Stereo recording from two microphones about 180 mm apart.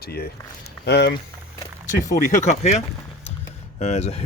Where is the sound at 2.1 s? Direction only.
40° left (ahead or behind).